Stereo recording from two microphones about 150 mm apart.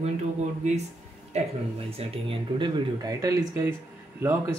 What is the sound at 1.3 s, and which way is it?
Speech, 45° right (ahead or behind).